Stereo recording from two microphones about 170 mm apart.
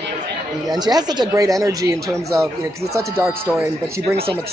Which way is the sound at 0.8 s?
25° right (ahead or behind).